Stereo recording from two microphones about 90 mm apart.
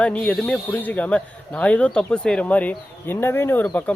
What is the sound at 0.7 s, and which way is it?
Speech, 20° left (ahead or behind).